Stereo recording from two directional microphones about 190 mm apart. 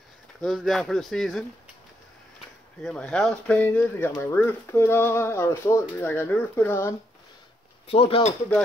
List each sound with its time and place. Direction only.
0.4 s speech: centre (ahead or behind)
2.8 s speech: 5° left (ahead or behind)
7.9 s speech: 30° left (ahead or behind)